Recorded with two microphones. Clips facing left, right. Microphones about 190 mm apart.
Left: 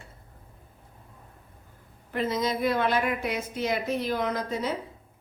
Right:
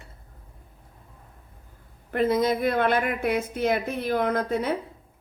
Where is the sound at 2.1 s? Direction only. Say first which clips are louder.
Right 5 dB; 55° right (ahead or behind).